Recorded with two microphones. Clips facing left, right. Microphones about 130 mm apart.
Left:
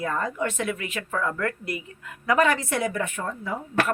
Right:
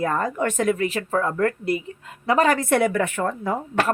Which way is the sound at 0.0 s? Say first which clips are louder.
Right 4 dB; 50° right (ahead or behind).